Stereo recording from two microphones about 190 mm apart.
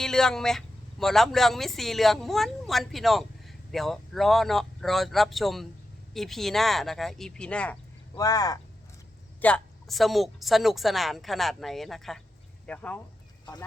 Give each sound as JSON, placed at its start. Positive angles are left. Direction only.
{"t": 0.0, "sound": "a woman's voice", "side_deg": 5}
{"t": 8.1, "sound": "speech", "side_deg": 20}
{"t": 9.4, "sound": "a woman's voice", "side_deg": 5}
{"t": 13.4, "sound": "speech", "side_deg": 20}